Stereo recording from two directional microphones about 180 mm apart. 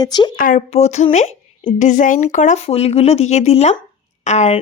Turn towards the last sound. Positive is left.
turn(degrees=40)  # may be behind; listen again after turning